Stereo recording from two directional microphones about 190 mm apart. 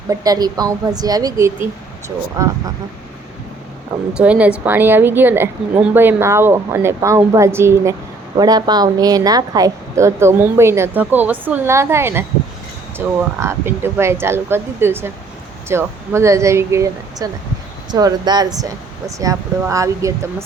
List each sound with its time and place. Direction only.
0.1 s speech: 20° right (ahead or behind)
4.2 s speech: 5° right (ahead or behind)